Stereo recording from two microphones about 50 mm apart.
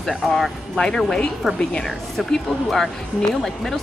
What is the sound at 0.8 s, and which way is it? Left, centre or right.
Speech, centre.